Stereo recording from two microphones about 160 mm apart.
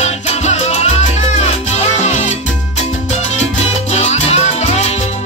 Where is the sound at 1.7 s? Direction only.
45° left (ahead or behind).